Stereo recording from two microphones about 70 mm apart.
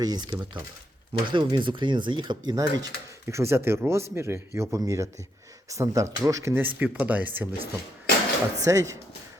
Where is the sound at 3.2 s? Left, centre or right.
Right.